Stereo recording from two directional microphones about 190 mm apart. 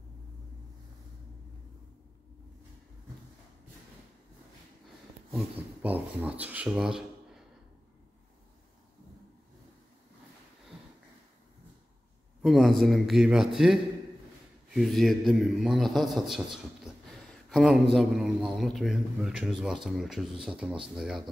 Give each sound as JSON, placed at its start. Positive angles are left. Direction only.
{"t": 5.3, "sound": "speech", "side_deg": -10}
{"t": 12.4, "sound": "a man's voice", "side_deg": 0}